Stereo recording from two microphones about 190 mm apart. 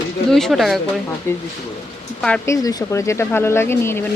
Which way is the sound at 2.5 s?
20° left (ahead or behind).